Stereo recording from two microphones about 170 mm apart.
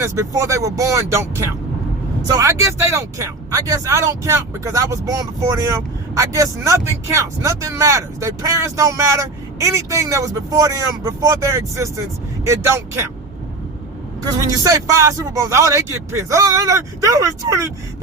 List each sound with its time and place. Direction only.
0.0 s speech: 20° right (ahead or behind)
14.4 s speech: 20° right (ahead or behind)